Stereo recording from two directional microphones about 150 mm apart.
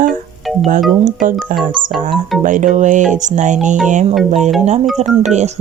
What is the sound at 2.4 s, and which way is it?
Speech, 60° right (ahead or behind).